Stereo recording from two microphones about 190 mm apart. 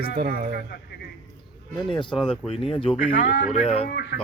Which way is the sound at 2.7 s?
30° left (ahead or behind).